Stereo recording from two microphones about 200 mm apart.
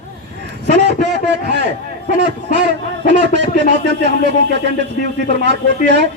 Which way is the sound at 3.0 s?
60° right (ahead or behind).